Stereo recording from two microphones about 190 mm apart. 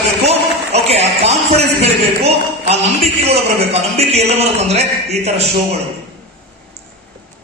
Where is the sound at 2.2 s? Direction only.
35° right (ahead or behind).